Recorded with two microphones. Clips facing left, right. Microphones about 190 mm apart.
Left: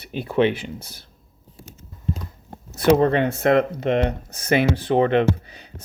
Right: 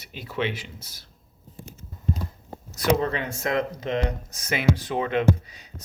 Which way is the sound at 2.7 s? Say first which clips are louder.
Left 7 dB; 60° left (ahead or behind).